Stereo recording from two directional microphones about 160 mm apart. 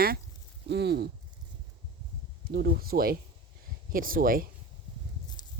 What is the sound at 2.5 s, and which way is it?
Speech, 70° right (ahead or behind).